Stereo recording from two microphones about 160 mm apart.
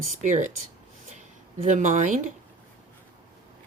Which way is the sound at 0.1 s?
50° right (ahead or behind).